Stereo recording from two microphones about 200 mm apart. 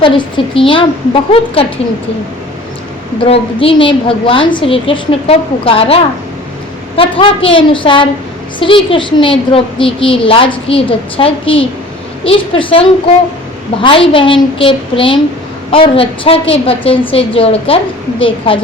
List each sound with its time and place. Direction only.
0.0 s a woman's voice: 25° left (ahead or behind)
3.2 s a woman's voice: 30° left (ahead or behind)
13.8 s a woman's voice: 25° left (ahead or behind)